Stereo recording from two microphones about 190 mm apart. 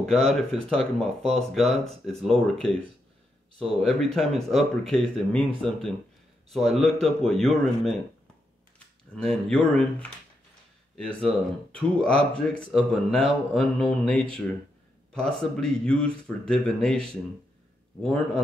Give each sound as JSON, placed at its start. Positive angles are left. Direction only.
{"t": 0.0, "sound": "speech", "side_deg": 0}